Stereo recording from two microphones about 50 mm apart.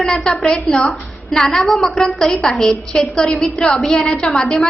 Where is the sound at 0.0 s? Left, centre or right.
Centre.